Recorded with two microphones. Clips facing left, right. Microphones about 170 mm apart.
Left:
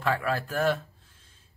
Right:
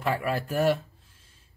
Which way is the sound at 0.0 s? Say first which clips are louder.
Even; 15° right (ahead or behind).